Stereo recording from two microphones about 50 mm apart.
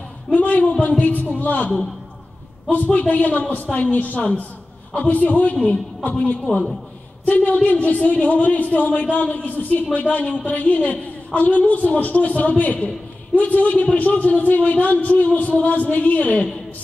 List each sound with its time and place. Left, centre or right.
0.3 s a sound: left
0.7 s a man's voice: left
2.7 s a man's voice: left